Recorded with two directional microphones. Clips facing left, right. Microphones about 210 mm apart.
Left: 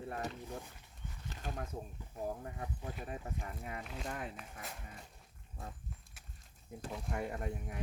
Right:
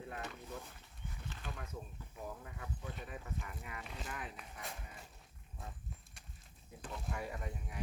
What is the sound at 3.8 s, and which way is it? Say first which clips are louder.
Speech: left 3 dB; centre (ahead or behind).